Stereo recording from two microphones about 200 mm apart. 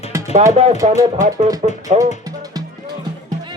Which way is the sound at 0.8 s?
30° right (ahead or behind).